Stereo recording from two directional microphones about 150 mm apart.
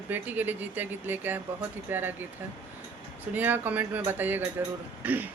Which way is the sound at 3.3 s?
10° right (ahead or behind).